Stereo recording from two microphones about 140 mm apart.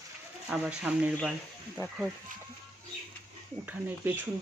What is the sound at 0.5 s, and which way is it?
Speech, 5° right (ahead or behind).